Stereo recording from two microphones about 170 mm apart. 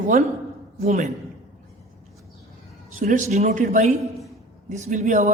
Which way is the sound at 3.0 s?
50° right (ahead or behind).